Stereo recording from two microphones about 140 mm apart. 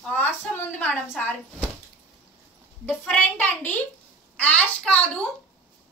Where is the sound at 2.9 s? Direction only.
10° left (ahead or behind).